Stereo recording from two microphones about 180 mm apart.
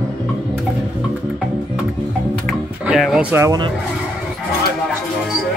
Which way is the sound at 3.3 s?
20° right (ahead or behind).